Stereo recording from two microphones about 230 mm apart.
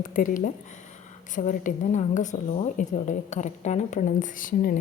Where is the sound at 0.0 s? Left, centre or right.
Left.